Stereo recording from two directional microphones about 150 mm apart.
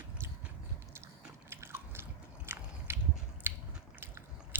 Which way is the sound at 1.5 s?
15° right (ahead or behind).